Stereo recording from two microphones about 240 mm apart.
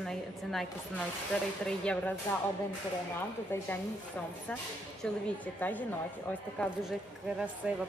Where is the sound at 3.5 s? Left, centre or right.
Centre.